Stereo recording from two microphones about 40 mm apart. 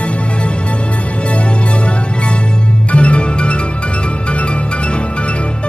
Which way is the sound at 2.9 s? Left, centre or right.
Left.